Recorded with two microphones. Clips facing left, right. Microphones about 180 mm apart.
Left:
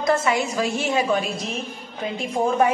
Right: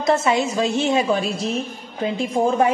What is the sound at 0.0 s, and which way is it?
A woman's voice, 25° right (ahead or behind).